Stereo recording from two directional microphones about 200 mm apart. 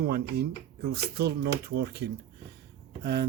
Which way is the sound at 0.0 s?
50° right (ahead or behind).